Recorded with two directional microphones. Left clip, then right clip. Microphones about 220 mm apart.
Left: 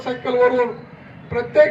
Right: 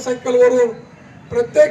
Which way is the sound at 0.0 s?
50° right (ahead or behind).